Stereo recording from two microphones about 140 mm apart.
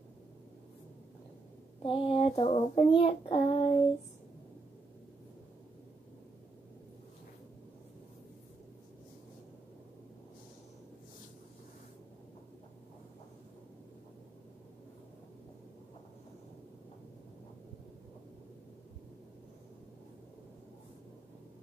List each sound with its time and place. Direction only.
1.8 s child singing: 40° left (ahead or behind)